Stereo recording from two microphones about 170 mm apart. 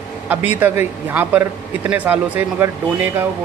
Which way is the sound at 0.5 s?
10° right (ahead or behind).